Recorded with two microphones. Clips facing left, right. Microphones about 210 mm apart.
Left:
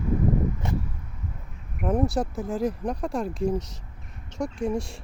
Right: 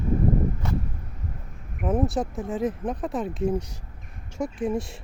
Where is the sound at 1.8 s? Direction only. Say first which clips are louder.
Even; centre (ahead or behind).